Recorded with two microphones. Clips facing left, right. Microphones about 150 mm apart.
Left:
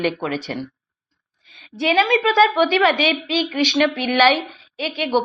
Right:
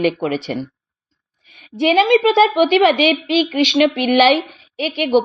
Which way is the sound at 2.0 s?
20° right (ahead or behind).